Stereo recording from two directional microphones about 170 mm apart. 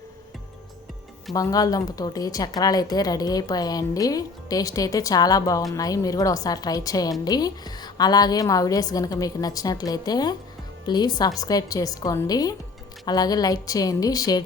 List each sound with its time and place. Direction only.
1.3 s a woman's voice: 20° left (ahead or behind)